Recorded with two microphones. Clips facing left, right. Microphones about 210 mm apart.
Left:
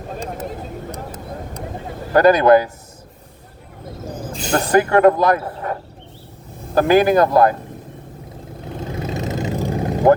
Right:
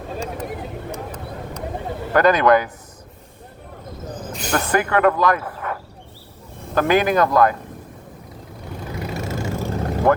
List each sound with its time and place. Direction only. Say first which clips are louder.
2.1 s speech: left 4 dB; 35° left (ahead or behind)
4.3 s speech: left 3 dB; 30° left (ahead or behind)
8.8 s vehicle: left 3 dB; 20° left (ahead or behind)